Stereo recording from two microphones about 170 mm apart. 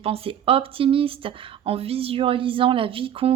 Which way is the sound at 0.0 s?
35° right (ahead or behind).